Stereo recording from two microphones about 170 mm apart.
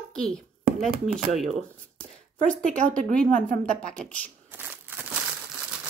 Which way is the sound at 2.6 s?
50° right (ahead or behind).